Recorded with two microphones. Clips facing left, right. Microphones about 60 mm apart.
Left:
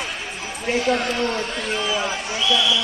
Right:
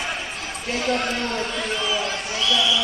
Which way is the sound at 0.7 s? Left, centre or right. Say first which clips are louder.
Left 3 dB; centre.